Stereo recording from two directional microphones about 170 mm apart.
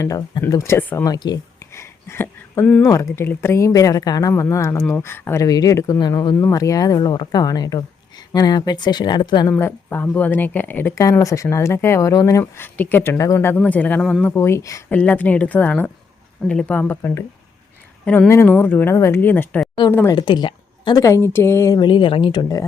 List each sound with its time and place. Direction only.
0.0 s speech: 20° left (ahead or behind)
9.6 s speech: 15° left (ahead or behind)
14.3 s speech: 15° left (ahead or behind)
20.1 s speech: 30° left (ahead or behind)